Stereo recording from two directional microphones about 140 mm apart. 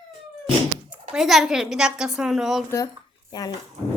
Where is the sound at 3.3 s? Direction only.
30° left (ahead or behind).